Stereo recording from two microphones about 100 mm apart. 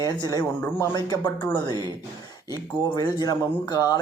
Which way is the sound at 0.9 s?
50° left (ahead or behind).